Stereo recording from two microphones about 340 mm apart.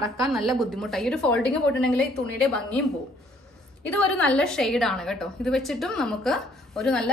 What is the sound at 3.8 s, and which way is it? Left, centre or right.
A woman's voice, centre.